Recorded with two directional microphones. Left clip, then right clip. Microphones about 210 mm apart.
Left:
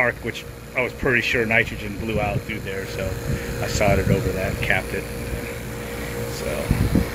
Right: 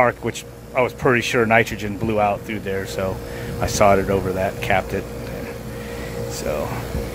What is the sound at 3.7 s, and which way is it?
Speech, 15° right (ahead or behind).